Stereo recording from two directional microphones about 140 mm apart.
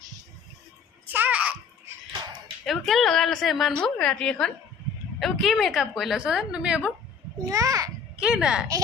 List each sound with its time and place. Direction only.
1.0 s babbling: 15° right (ahead or behind)
2.6 s a woman's voice: centre (ahead or behind)
7.4 s a child's voice: 25° right (ahead or behind)
8.1 s speech: 5° right (ahead or behind)